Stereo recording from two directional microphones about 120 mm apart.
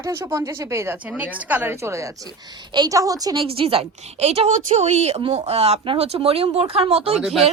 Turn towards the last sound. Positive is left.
turn(degrees=-5)  # may be behind; listen again after turning